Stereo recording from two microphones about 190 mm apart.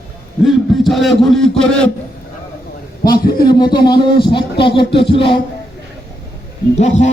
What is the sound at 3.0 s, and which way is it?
Speech, 55° left (ahead or behind).